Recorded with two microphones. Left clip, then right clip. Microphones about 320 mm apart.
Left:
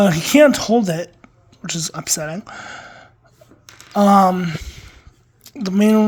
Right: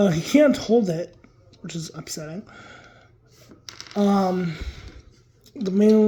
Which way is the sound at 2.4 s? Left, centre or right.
Left.